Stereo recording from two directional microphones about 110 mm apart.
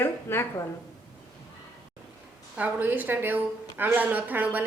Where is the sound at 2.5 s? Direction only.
15° right (ahead or behind).